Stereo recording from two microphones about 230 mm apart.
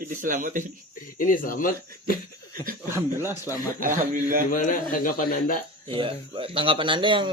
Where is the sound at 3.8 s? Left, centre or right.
Right.